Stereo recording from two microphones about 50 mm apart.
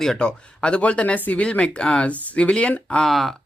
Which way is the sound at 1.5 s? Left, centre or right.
Left.